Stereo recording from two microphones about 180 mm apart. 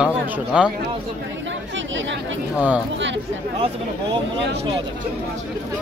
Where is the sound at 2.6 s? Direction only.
5° right (ahead or behind).